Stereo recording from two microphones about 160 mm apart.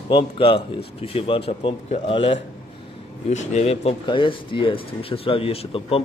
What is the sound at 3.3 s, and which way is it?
Speech, 45° left (ahead or behind).